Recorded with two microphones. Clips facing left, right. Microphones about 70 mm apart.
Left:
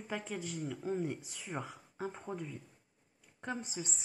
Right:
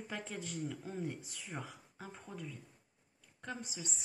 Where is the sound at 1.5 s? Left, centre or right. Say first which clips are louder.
Left 4 dB; centre.